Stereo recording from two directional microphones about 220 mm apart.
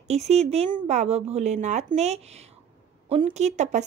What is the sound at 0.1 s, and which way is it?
A woman's voice, 30° right (ahead or behind).